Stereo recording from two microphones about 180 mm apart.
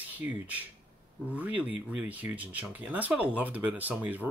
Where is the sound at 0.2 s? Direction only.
10° right (ahead or behind).